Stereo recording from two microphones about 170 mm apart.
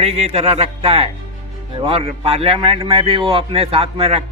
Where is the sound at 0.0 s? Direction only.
35° right (ahead or behind).